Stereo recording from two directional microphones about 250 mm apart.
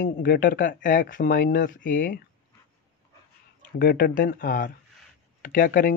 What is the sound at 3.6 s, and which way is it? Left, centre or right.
Speech, left.